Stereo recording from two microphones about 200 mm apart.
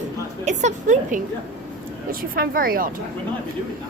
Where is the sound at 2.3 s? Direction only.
45° right (ahead or behind).